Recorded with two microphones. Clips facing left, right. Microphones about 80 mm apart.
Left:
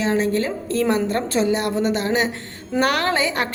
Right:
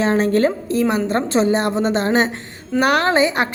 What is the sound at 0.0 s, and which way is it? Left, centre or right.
Speech, right.